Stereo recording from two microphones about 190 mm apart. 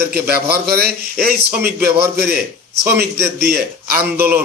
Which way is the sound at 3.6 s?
55° right (ahead or behind).